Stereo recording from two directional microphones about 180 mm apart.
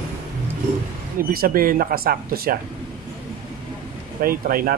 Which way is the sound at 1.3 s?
55° right (ahead or behind).